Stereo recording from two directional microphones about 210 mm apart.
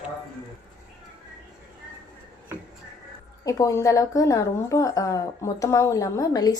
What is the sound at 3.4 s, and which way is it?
A woman's voice, 15° left (ahead or behind).